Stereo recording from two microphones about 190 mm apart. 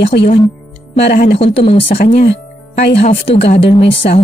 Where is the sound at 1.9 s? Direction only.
35° left (ahead or behind).